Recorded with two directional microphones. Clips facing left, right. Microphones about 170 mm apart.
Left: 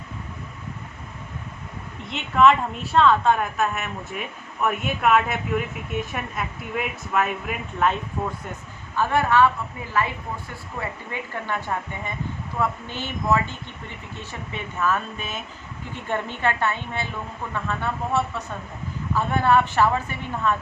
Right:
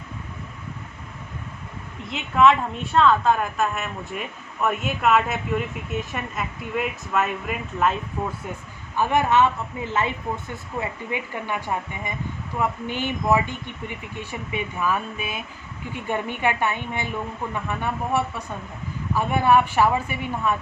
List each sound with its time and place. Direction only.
2.0 s a woman's voice: centre (ahead or behind)
9.0 s speech: 15° right (ahead or behind)